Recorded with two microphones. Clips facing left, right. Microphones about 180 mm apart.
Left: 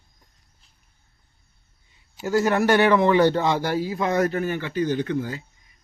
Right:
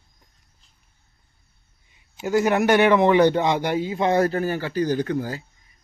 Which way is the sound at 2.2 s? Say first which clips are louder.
Right 1 dB; 20° right (ahead or behind).